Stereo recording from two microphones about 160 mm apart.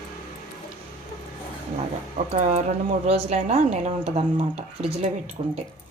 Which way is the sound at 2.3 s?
45° right (ahead or behind).